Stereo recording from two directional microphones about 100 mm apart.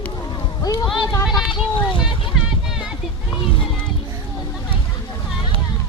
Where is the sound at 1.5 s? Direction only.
55° left (ahead or behind).